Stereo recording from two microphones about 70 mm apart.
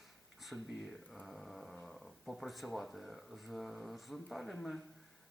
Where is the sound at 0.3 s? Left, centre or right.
Centre.